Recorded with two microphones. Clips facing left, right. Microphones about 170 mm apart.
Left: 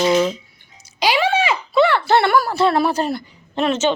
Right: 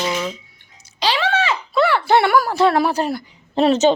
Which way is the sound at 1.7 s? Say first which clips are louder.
Left 2 dB; 5° right (ahead or behind).